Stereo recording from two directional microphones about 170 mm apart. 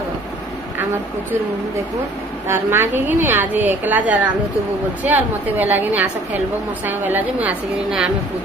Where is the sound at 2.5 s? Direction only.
15° right (ahead or behind).